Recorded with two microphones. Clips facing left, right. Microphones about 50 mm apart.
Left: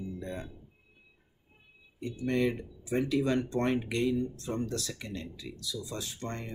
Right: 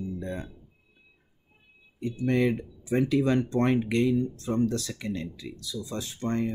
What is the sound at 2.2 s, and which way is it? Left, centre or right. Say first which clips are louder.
Speech: right 4 dB; right.